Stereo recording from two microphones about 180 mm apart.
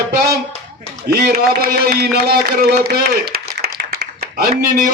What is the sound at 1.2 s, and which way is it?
A man's voice, 60° right (ahead or behind).